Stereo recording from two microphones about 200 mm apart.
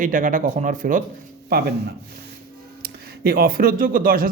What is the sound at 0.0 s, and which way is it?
Speech, 40° right (ahead or behind).